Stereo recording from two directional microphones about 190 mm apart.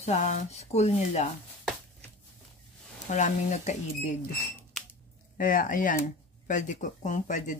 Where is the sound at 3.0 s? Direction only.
40° left (ahead or behind).